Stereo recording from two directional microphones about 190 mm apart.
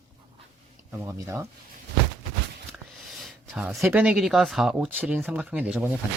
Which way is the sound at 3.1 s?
5° right (ahead or behind).